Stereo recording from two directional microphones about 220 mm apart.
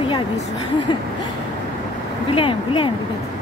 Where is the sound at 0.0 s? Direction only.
25° left (ahead or behind).